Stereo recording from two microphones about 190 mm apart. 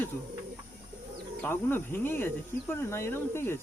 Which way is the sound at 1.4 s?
10° left (ahead or behind).